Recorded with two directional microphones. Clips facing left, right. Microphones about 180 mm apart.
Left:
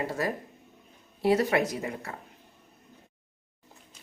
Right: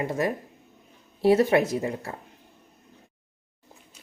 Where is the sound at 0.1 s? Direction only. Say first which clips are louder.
Right 4 dB; 20° right (ahead or behind).